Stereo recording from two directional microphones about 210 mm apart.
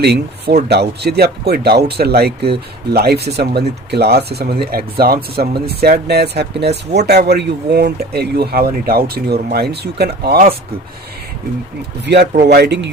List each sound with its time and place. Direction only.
0.0 s speech: 50° right (ahead or behind)
12.0 s speech: 55° right (ahead or behind)